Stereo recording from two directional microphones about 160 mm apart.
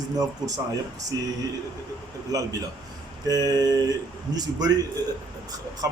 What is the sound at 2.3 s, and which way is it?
Speech, 20° right (ahead or behind).